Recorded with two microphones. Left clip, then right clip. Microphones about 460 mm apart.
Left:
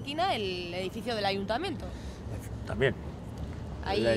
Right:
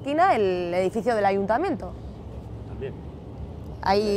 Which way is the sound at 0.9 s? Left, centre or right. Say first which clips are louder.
Right 7 dB; right.